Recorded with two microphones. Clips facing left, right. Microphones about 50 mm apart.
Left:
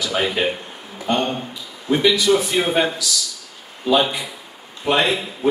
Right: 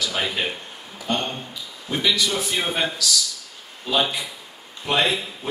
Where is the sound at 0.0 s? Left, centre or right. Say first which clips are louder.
Left 5 dB; centre.